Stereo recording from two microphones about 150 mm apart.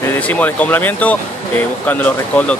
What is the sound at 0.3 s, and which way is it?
Speech, 10° left (ahead or behind).